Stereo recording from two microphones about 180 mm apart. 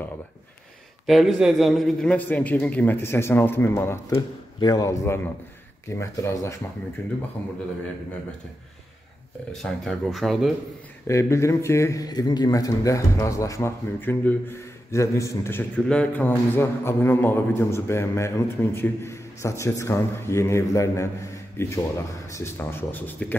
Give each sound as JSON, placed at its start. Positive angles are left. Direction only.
{"t": 1.0, "sound": "a man's voice", "side_deg": 0}
{"t": 9.5, "sound": "speech", "side_deg": 0}
{"t": 11.1, "sound": "a man's voice", "side_deg": 15}